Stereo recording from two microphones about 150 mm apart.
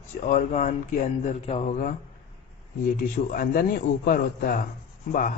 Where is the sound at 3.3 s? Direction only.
75° left (ahead or behind).